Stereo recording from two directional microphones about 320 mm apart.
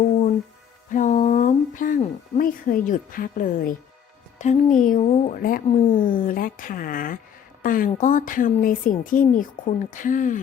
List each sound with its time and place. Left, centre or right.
0.9 s speech: left